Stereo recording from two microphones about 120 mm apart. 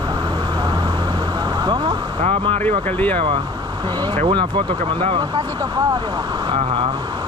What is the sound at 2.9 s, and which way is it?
Speech, 15° left (ahead or behind).